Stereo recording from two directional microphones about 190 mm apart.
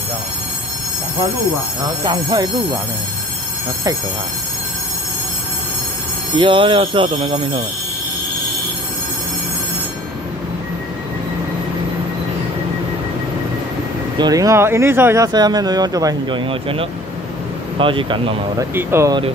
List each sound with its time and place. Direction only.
2.0 s speech: 25° right (ahead or behind)
6.3 s speech: 25° right (ahead or behind)
14.1 s speech: 20° right (ahead or behind)
18.8 s speech: 15° right (ahead or behind)